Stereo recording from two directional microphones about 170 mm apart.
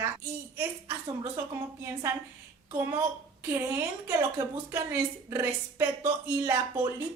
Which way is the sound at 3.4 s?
15° right (ahead or behind).